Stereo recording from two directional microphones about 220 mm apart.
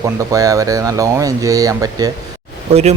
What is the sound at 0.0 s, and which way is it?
Speech, 15° right (ahead or behind).